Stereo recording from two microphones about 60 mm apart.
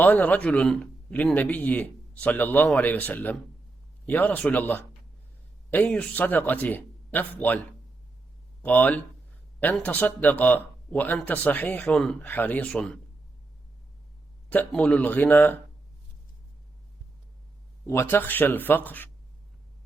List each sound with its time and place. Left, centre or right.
0.0 s speech: left
1.1 s speech: left
8.6 s speech: left
14.8 s speech: left
18.0 s speech: left